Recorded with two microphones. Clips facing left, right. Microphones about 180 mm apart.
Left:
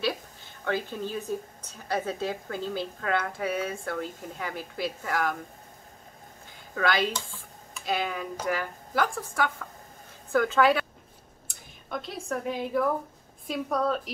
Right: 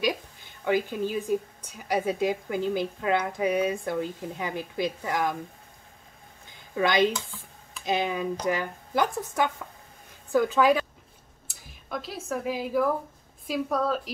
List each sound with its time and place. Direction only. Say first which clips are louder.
0.0 s a woman's voice: right 2 dB; 15° right (ahead or behind)
6.7 s a woman's voice: right 4 dB; 20° right (ahead or behind)
11.4 s a woman's voice: right 1 dB; centre (ahead or behind)